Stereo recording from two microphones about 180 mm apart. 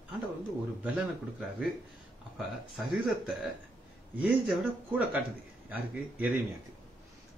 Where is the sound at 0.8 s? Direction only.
5° right (ahead or behind).